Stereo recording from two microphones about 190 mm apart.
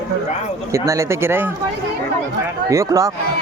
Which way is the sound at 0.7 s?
15° right (ahead or behind).